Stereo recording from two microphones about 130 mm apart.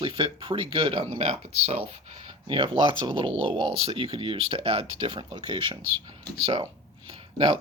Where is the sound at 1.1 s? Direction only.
50° right (ahead or behind).